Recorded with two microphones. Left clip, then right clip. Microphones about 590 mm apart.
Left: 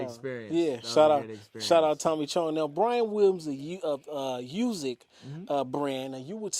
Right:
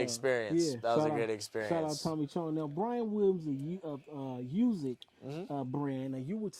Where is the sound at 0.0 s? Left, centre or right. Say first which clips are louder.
Right 4 dB; right.